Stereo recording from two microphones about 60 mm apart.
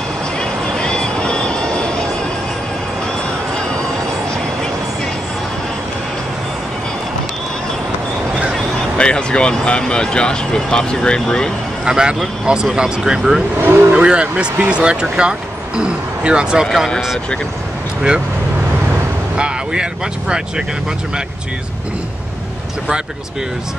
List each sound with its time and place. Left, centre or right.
0.4 s a sound: centre
8.9 s speech: centre
11.8 s speech: centre
13.6 s speech: right
13.9 s speech: centre
19.3 s speech: centre